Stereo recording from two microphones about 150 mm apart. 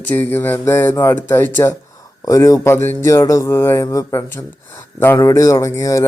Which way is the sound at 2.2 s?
25° left (ahead or behind).